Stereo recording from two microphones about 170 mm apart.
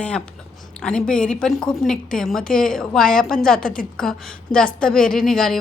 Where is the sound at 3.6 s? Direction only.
55° left (ahead or behind).